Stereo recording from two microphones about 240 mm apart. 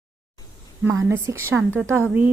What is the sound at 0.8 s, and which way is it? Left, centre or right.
Speech, centre.